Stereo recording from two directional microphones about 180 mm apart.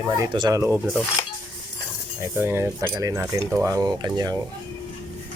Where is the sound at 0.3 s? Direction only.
20° right (ahead or behind).